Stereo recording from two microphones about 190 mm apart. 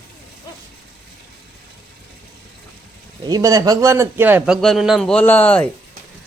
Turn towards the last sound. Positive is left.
turn(degrees=5)  # may be behind; listen again after turning